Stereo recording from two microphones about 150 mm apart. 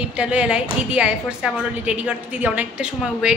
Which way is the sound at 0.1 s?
10° right (ahead or behind).